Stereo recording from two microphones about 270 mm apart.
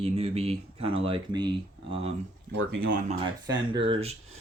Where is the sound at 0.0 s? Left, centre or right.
Right.